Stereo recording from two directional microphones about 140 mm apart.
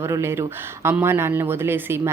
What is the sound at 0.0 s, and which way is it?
Speech, 20° right (ahead or behind).